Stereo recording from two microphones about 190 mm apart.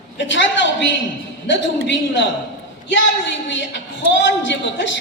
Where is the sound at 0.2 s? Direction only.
75° left (ahead or behind).